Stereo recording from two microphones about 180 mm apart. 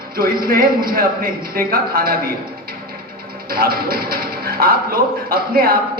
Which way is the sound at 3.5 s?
55° right (ahead or behind).